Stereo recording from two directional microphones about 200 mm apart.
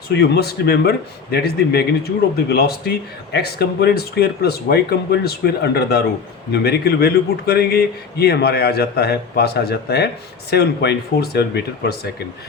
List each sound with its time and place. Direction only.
0.1 s speech: 55° left (ahead or behind)